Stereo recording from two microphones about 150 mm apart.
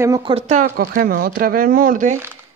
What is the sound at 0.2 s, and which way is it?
Speech, 40° right (ahead or behind).